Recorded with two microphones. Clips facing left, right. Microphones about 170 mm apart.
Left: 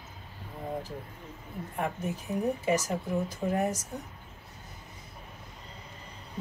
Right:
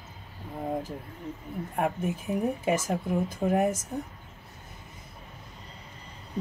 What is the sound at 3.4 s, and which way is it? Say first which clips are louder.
Speech: right 5 dB; 55° right (ahead or behind).